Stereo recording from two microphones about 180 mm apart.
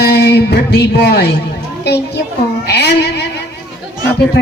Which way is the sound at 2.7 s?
65° left (ahead or behind).